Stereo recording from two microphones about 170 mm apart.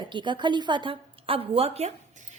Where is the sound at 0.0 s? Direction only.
30° right (ahead or behind).